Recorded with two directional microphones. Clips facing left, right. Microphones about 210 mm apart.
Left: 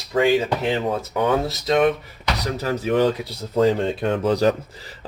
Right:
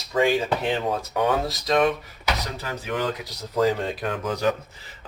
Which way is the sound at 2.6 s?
40° left (ahead or behind).